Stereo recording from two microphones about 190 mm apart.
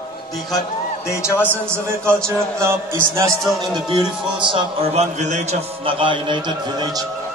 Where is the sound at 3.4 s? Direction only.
Centre (ahead or behind).